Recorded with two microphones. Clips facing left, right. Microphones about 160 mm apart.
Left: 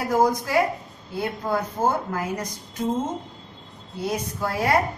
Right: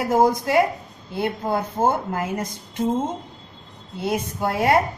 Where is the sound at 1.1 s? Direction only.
25° right (ahead or behind).